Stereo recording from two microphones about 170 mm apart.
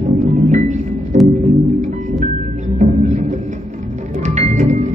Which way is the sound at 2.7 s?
45° right (ahead or behind).